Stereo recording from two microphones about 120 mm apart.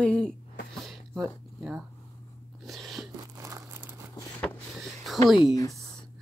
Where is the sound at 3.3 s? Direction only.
25° right (ahead or behind).